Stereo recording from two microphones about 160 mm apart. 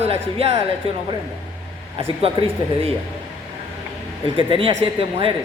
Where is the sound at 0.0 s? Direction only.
35° right (ahead or behind).